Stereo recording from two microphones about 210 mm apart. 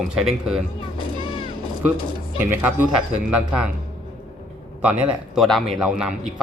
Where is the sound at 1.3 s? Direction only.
25° left (ahead or behind).